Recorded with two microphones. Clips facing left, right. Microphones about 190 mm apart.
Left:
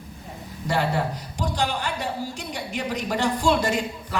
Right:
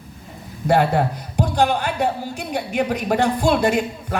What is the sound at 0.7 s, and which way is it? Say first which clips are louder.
A man's voice: right 7 dB; 55° right (ahead or behind).